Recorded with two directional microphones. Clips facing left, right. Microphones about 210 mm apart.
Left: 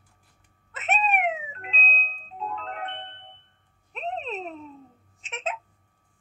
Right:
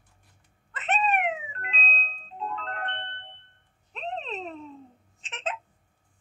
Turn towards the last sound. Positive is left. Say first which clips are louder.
# left 2 dB
turn(degrees=10)  # may be behind; listen again after turning